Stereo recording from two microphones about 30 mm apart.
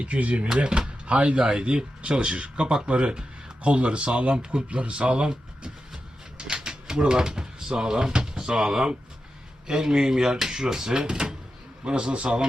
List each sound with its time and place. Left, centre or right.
0.0 s speech: right
0.7 s speech: right
6.3 s typewriter: right
9.6 s speech: right